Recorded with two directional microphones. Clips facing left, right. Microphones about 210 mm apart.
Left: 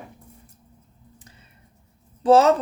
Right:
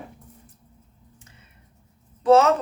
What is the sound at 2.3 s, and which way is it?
Speech, 35° left (ahead or behind).